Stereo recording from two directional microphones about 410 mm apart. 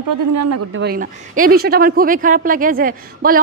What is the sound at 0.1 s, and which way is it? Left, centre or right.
Speech, right.